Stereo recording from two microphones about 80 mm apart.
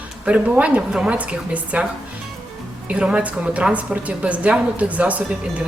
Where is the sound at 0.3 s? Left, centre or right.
Centre.